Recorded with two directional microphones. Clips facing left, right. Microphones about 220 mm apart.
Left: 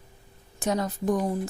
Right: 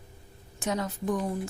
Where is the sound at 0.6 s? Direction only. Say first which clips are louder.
Left 4 dB; 40° left (ahead or behind).